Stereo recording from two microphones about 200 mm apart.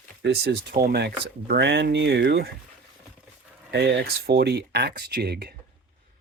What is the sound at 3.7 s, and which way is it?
Speech, 60° right (ahead or behind).